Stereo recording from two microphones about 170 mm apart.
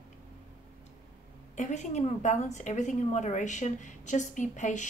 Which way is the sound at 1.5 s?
45° left (ahead or behind).